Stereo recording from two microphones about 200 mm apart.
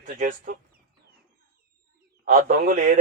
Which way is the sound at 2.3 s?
40° right (ahead or behind).